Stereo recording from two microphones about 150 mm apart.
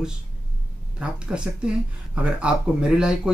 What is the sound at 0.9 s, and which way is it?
Speech, 5° right (ahead or behind).